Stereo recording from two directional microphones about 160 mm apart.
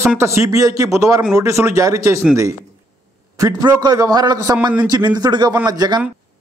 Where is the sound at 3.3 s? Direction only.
20° right (ahead or behind).